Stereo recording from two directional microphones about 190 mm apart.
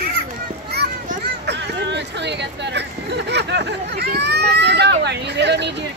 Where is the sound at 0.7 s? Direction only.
60° right (ahead or behind).